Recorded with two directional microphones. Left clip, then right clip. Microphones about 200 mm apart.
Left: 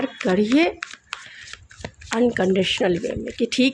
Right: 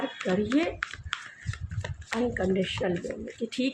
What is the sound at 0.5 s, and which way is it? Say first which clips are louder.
Speech: left 9 dB; 50° left (ahead or behind).